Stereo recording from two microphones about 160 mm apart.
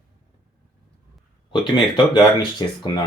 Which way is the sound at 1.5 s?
30° left (ahead or behind).